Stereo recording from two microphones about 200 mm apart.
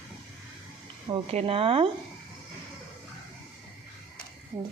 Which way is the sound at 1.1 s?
30° right (ahead or behind).